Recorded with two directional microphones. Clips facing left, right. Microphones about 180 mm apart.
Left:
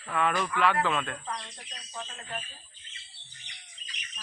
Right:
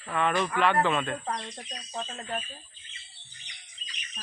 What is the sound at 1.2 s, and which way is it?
Speech, 40° right (ahead or behind).